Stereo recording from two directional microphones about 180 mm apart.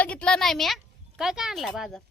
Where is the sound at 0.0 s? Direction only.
5° left (ahead or behind).